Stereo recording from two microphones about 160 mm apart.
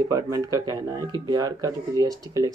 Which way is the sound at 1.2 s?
25° right (ahead or behind).